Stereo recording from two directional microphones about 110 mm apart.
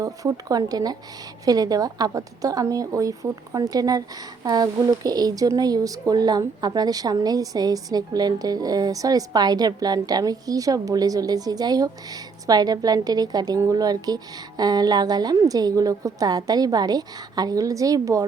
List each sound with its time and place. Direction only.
0.0 s speech: 30° right (ahead or behind)